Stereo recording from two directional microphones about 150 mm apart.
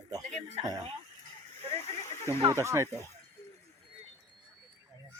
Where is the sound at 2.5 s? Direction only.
20° right (ahead or behind).